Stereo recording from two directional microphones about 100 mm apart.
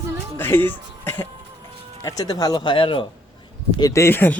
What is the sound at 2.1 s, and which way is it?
Speech, 40° left (ahead or behind).